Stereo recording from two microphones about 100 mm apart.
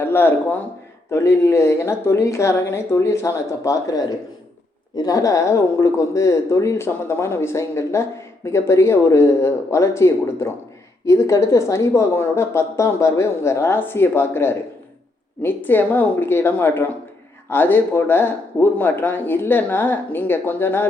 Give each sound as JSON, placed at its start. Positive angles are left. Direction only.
{"t": 0.0, "sound": "a woman's voice", "side_deg": 20}